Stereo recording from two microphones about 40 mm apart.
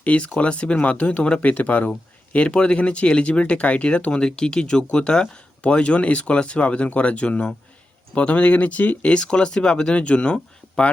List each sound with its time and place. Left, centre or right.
0.0 s speech: left
2.3 s speech: left
9.1 s speech: left